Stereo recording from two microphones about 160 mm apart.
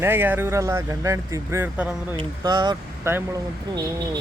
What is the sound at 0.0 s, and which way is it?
Speech, 15° right (ahead or behind).